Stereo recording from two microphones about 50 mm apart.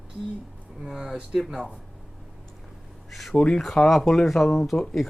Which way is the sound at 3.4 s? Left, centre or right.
Centre.